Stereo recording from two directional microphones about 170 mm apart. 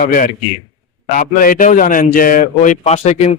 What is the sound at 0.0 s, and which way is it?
A man's voice, 55° left (ahead or behind).